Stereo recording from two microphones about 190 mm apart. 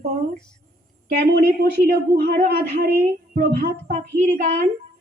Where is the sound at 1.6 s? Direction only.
55° right (ahead or behind).